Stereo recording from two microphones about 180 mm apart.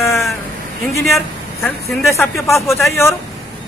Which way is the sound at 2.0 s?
15° left (ahead or behind).